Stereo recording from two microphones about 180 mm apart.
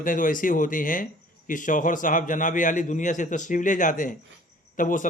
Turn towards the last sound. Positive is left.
turn(degrees=45)  # may be behind; listen again after turning